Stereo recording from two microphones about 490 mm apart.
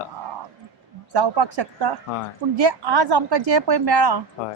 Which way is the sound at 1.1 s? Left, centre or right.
Right.